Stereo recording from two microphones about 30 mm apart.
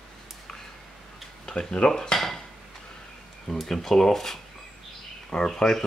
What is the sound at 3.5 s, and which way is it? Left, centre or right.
Speech, left.